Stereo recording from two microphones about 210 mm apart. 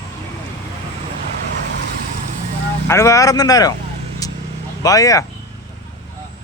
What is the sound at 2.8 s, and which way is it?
Speech, 15° left (ahead or behind).